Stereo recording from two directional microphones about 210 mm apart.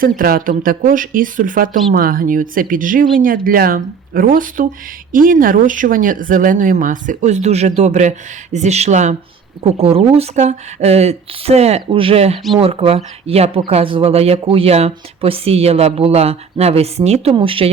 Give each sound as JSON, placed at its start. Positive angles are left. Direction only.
{"t": 0.0, "sound": "speech", "side_deg": -45}